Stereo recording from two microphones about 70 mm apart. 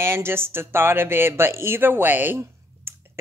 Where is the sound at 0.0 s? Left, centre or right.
Right.